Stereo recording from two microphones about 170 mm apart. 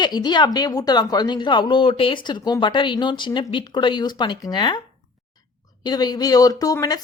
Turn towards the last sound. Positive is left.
turn(degrees=20)  # may be behind; listen again after turning